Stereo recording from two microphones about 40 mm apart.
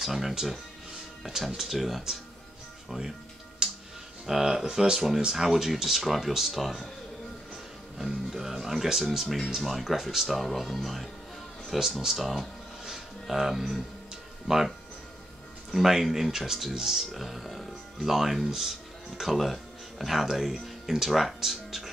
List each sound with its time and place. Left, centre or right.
0.0 s speech: centre
3.6 s music: centre
4.3 s speech: centre
8.0 s speech: centre
12.8 s a sound: centre
15.7 s speech: centre